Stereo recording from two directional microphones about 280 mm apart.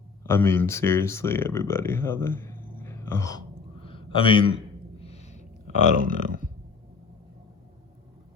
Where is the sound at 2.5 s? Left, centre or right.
Right.